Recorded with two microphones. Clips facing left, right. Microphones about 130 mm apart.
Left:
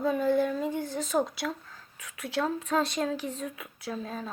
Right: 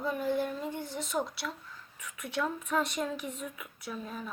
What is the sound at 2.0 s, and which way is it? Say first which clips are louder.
Speech: left 3 dB; 90° left.